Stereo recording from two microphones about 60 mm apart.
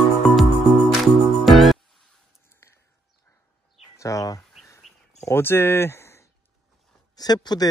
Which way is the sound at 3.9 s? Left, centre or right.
Left.